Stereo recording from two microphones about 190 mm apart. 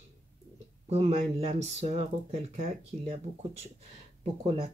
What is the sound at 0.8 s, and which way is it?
Speech, 35° right (ahead or behind).